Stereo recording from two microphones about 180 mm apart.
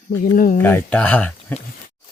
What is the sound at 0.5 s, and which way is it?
Speech, 10° left (ahead or behind).